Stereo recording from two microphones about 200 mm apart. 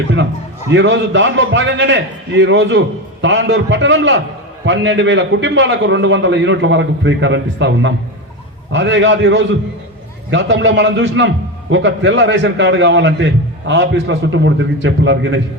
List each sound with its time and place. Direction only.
0.7 s a man's voice: 65° right (ahead or behind)